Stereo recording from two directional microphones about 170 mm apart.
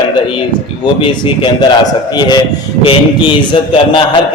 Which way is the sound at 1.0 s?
30° left (ahead or behind).